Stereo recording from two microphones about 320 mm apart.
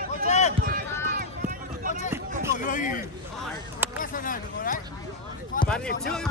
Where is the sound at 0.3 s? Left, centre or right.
Left.